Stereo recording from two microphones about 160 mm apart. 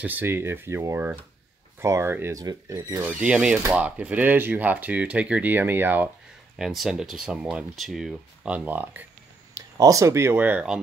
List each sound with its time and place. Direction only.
0.0 s speech: 10° right (ahead or behind)
6.6 s speech: centre (ahead or behind)